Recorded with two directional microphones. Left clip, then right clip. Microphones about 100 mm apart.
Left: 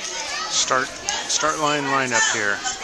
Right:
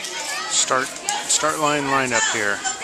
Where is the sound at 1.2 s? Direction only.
10° right (ahead or behind).